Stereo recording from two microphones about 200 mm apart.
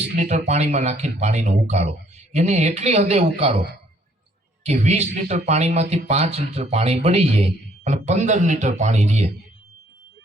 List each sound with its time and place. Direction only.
0.2 s speech: 35° right (ahead or behind)
4.6 s speech: 35° right (ahead or behind)